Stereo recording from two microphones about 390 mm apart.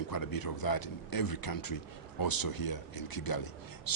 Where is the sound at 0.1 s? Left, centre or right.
Left.